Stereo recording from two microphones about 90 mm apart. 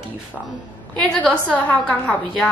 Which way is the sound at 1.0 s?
10° left (ahead or behind).